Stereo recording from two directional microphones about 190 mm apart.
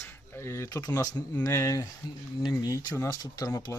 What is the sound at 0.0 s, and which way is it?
Speech, 15° left (ahead or behind).